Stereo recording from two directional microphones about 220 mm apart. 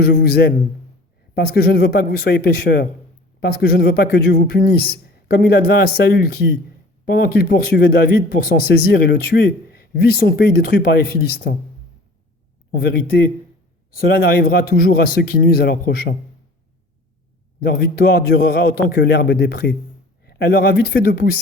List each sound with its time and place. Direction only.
0.0 s a man's voice: 45° left (ahead or behind)
12.7 s a man's voice: 50° left (ahead or behind)
17.6 s a man's voice: 45° left (ahead or behind)